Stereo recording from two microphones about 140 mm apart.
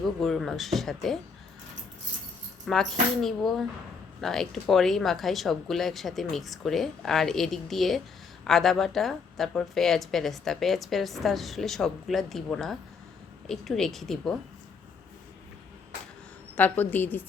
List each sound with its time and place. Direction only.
0.0 s speech: centre (ahead or behind)
2.6 s speech: centre (ahead or behind)
16.6 s a woman's voice: 10° left (ahead or behind)